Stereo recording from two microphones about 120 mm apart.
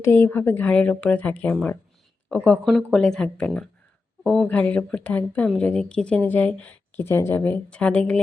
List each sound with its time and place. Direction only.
0.0 s speech: 20° left (ahead or behind)